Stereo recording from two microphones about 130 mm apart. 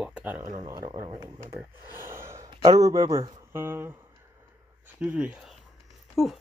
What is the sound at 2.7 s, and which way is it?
Speech, 25° right (ahead or behind).